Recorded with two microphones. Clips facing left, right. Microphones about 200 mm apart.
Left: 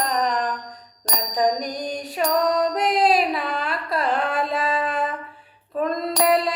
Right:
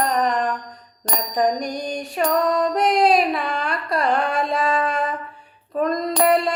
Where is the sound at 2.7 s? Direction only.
Centre (ahead or behind).